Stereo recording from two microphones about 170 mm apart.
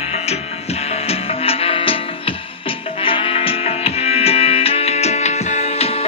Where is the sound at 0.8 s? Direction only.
35° left (ahead or behind).